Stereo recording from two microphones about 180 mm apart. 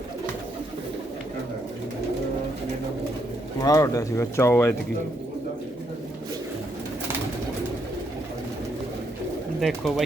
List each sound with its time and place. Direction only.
3.6 s speech: 20° left (ahead or behind)
9.6 s speech: centre (ahead or behind)